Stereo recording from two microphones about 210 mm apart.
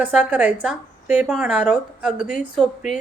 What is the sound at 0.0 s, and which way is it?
A woman's voice, 5° right (ahead or behind).